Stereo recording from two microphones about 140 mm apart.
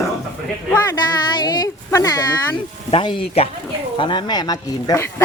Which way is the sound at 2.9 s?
40° left (ahead or behind).